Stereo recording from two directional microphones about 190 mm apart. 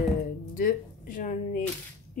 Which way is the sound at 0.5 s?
45° left (ahead or behind).